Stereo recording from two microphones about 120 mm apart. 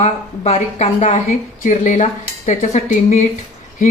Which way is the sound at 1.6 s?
90° left.